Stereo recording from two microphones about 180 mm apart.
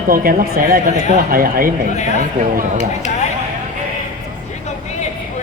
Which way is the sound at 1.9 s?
40° left (ahead or behind).